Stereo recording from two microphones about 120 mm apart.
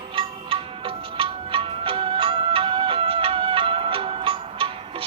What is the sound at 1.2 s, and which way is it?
Music, 45° right (ahead or behind).